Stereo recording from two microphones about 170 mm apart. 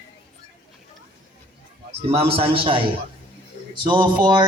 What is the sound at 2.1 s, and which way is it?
A man's voice, 35° right (ahead or behind).